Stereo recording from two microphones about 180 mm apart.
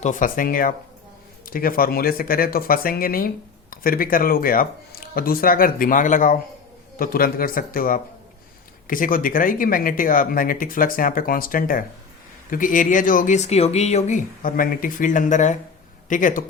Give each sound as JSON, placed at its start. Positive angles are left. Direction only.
{"t": 0.0, "sound": "speech", "side_deg": 45}